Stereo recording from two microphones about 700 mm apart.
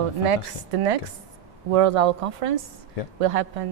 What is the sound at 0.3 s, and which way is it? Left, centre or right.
Speech, right.